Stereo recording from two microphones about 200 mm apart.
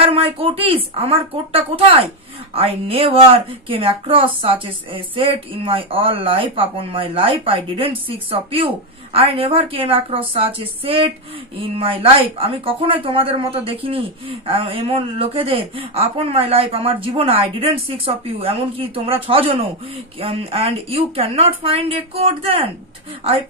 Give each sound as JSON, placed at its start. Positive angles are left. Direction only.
{"t": 0.0, "sound": "speech", "side_deg": -30}